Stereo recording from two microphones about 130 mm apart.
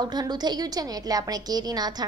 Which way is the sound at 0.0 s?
30° right (ahead or behind).